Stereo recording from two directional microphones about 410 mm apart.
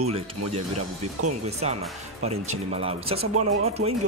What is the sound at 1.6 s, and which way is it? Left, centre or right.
Speech, centre.